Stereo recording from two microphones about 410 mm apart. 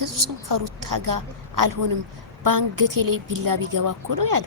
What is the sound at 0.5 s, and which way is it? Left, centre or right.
A woman's voice, right.